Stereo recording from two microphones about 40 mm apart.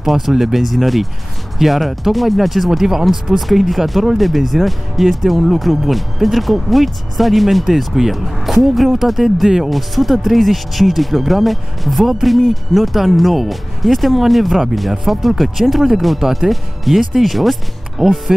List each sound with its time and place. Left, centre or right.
0.0 s speech: centre